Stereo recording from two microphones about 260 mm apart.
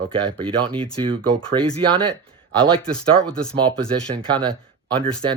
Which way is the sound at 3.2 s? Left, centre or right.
Centre.